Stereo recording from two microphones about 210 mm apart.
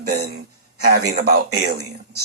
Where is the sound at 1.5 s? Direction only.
50° right (ahead or behind).